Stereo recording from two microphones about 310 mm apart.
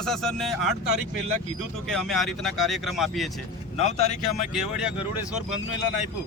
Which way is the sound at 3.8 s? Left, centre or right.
Left.